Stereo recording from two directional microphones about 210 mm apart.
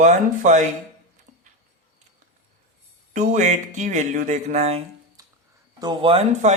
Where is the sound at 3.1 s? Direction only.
35° right (ahead or behind).